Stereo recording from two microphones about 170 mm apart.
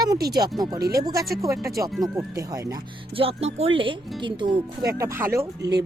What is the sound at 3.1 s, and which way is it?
Speech, 35° right (ahead or behind).